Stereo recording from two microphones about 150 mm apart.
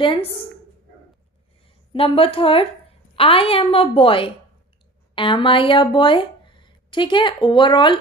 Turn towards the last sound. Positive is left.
turn(degrees=30)  # may be behind; listen again after turning